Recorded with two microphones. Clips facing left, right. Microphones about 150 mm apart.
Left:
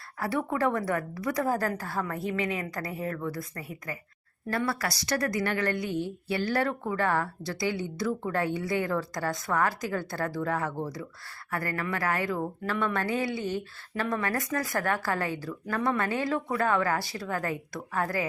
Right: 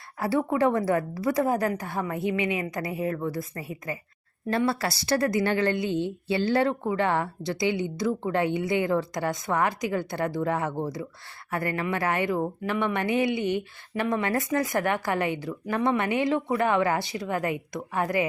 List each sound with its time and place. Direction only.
0.2 s a woman's voice: 25° right (ahead or behind)